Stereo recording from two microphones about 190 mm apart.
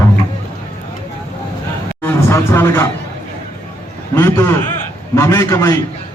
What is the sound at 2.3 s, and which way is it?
Speech, 15° left (ahead or behind).